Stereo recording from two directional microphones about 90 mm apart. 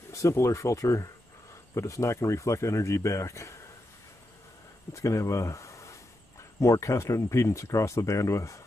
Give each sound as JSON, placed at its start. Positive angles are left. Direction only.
{"t": 0.1, "sound": "speech", "side_deg": 30}
{"t": 4.9, "sound": "speech", "side_deg": 35}